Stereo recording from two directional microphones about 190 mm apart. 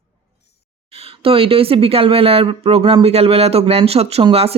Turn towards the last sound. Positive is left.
turn(degrees=-30)  # may be behind; listen again after turning